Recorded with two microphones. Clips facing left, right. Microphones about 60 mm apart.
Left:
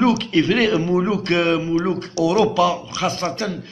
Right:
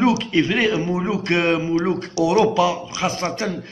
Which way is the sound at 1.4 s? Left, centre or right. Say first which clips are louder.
Right 1 dB; right.